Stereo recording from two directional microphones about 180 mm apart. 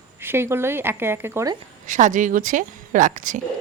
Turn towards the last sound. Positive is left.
turn(degrees=-45)  # may be behind; listen again after turning